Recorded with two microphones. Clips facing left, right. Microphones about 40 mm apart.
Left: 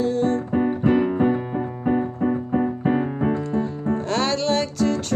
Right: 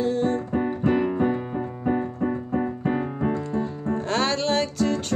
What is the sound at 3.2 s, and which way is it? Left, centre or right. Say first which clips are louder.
Music: left 3 dB; left.